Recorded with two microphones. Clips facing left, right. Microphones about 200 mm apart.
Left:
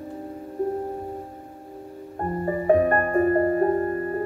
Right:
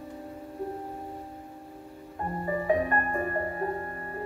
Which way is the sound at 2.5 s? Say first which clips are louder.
Left 7 dB; 50° left (ahead or behind).